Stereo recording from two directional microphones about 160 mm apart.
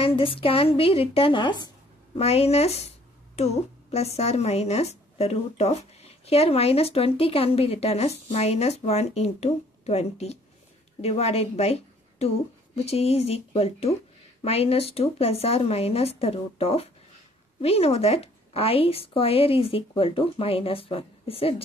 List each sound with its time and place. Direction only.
0.0 s a woman's voice: 35° left (ahead or behind)
2.1 s a woman's voice: 40° left (ahead or behind)